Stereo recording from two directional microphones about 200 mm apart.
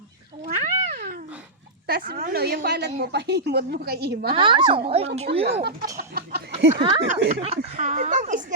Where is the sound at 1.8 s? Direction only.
50° right (ahead or behind).